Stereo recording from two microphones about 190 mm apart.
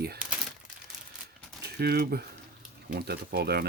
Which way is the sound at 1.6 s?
55° right (ahead or behind).